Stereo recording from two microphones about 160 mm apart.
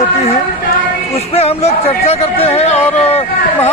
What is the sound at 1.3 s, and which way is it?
Speech, 40° left (ahead or behind).